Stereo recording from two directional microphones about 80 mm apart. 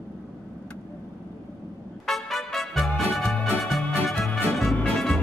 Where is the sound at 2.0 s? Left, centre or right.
Centre.